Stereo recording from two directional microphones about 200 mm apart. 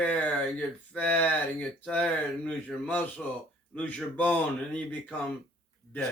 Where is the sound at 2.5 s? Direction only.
5° left (ahead or behind).